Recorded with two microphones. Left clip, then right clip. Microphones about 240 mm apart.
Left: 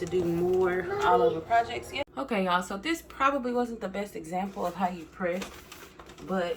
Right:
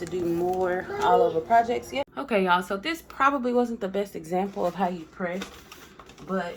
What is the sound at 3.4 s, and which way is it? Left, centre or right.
Speech, right.